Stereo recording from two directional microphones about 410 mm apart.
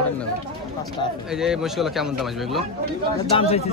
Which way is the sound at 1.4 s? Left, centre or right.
Centre.